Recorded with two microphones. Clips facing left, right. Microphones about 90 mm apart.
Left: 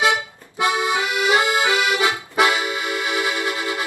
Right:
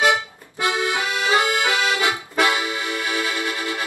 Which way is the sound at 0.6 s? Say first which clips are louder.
Left 2 dB; 20° left (ahead or behind).